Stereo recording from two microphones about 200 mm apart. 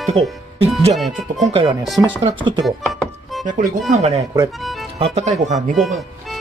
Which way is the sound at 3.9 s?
35° right (ahead or behind).